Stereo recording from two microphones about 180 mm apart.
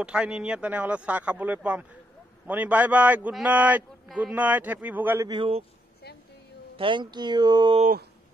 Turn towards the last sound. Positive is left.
turn(degrees=-25)  # may be behind; listen again after turning